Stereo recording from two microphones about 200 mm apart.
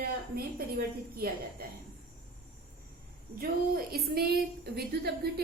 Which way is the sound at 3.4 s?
50° right (ahead or behind).